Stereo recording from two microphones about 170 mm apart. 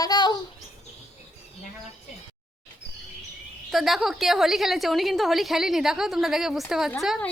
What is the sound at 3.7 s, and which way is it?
A woman's voice, centre (ahead or behind).